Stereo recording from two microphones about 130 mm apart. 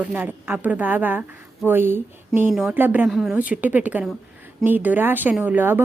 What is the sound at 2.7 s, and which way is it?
Speech, 15° right (ahead or behind).